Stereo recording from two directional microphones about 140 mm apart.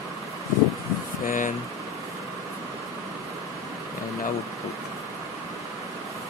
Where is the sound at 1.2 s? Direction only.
70° left (ahead or behind).